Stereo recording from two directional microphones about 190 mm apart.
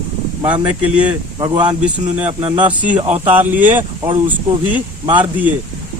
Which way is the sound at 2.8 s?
10° right (ahead or behind).